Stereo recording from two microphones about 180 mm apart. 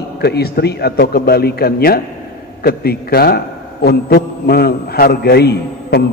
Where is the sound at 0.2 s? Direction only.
65° left (ahead or behind).